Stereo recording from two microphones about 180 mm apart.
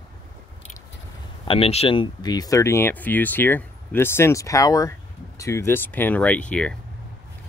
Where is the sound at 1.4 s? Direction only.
30° left (ahead or behind); by 6.7 s 5° left (ahead or behind).